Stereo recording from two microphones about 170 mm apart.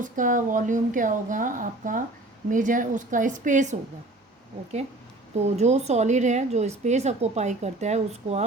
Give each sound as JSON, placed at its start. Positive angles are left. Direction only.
{"t": 0.0, "sound": "a woman's voice", "side_deg": -50}
{"t": 5.5, "sound": "a woman's voice", "side_deg": -40}